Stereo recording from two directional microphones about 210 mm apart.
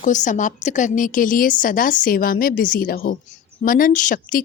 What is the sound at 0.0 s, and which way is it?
A woman's voice, 35° left (ahead or behind).